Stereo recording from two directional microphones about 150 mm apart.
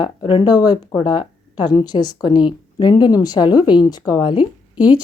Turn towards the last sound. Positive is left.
turn(degrees=30)  # may be behind; listen again after turning